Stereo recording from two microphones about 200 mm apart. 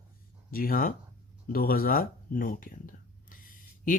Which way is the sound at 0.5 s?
45° left (ahead or behind).